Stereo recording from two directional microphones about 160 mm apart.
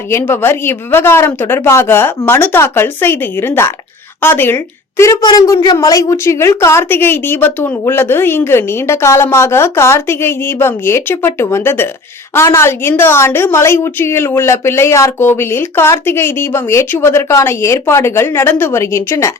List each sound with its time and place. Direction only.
0.1 s a woman's voice: 15° left (ahead or behind)